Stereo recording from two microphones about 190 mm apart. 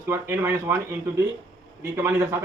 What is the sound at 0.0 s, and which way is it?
Speech, 10° right (ahead or behind).